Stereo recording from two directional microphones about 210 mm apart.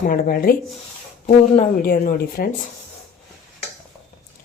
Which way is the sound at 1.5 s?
40° left (ahead or behind).